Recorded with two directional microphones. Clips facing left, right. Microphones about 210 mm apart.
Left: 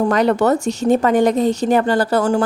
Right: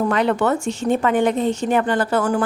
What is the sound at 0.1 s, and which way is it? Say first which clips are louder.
A woman's voice: left 4 dB; 40° left (ahead or behind).